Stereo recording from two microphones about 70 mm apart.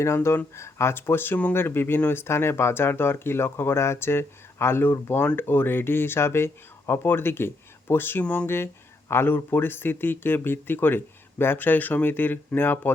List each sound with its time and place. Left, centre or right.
0.0 s speech: left
8.2 s speech: left
8.4 s speech: left